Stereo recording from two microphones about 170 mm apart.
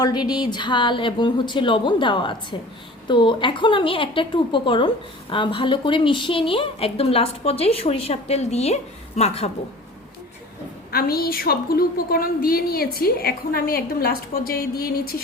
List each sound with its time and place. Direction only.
0.0 s a woman's voice: 25° left (ahead or behind); by 9.5 s 40° left (ahead or behind)
10.9 s a woman's voice: 60° left (ahead or behind)